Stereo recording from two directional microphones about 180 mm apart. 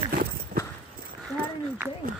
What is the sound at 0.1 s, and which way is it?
Dog, 60° right (ahead or behind).